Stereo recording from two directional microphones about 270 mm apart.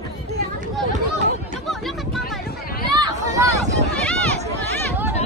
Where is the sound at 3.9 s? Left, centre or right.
Centre.